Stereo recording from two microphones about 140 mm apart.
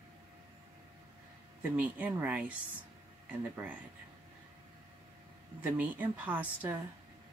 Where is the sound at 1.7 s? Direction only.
10° right (ahead or behind).